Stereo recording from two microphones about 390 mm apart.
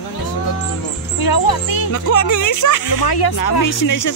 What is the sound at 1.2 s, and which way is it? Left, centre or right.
Speech, left.